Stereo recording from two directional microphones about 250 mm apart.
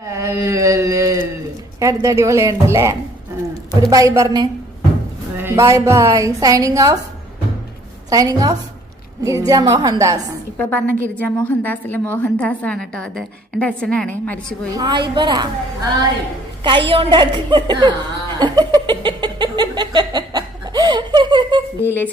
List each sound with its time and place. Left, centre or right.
0.1 s a sound: centre
1.8 s a woman's voice: centre
8.1 s a woman's voice: centre
10.6 s a woman's voice: centre
14.8 s a woman's voice: centre
16.9 s chuckle: centre
21.8 s a woman's voice: centre